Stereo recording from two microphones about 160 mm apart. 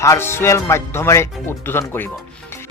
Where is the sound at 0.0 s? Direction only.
15° left (ahead or behind).